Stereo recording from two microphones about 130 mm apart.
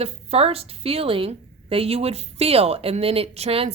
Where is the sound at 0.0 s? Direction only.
50° right (ahead or behind).